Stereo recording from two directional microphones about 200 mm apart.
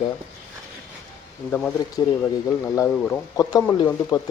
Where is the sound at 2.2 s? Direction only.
10° left (ahead or behind).